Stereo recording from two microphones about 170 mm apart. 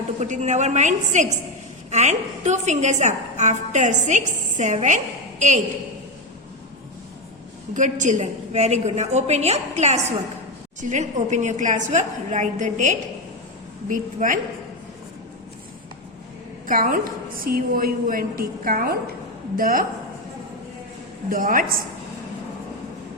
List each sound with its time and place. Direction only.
0.2 s a woman's voice: 45° right (ahead or behind)
7.7 s a woman's voice: 45° right (ahead or behind)
16.6 s a woman's voice: 55° right (ahead or behind)
21.2 s a woman's voice: 55° right (ahead or behind)